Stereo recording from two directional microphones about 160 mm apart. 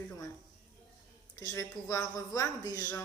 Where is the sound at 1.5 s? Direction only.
20° left (ahead or behind).